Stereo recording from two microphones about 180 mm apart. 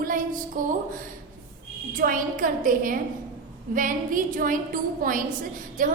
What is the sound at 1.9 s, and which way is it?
A woman's voice, 50° right (ahead or behind).